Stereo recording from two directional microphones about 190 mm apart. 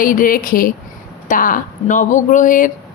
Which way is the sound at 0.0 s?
45° left (ahead or behind).